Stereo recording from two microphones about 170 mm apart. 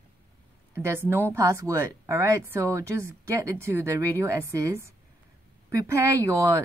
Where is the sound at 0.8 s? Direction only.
15° right (ahead or behind).